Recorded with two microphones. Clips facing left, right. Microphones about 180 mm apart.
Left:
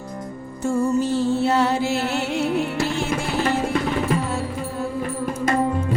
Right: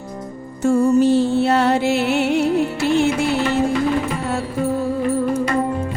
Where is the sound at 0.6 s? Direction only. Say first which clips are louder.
Right 6 dB; 70° right (ahead or behind).